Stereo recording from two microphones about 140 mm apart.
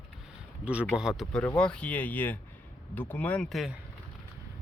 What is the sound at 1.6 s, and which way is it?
Speech, 10° left (ahead or behind).